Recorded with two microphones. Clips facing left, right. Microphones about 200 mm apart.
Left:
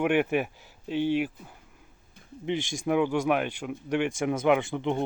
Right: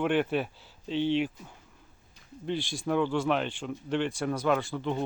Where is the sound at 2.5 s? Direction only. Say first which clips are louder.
Left 3 dB; 15° left (ahead or behind).